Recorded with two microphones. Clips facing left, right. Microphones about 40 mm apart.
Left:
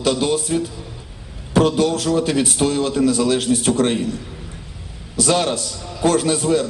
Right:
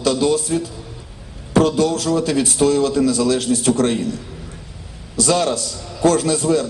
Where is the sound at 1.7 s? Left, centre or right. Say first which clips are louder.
Even; left.